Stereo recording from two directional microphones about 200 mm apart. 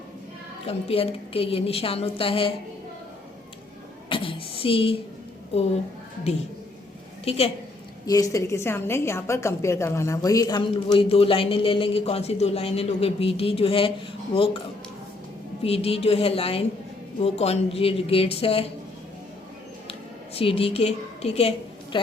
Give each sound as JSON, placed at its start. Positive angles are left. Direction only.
{"t": 0.6, "sound": "a woman's voice", "side_deg": 30}
{"t": 4.1, "sound": "a sound", "side_deg": 25}
{"t": 7.3, "sound": "a woman's voice", "side_deg": 30}
{"t": 8.0, "sound": "a woman's voice", "side_deg": 15}
{"t": 15.6, "sound": "a woman's voice", "side_deg": 30}
{"t": 19.9, "sound": "a woman's voice", "side_deg": 30}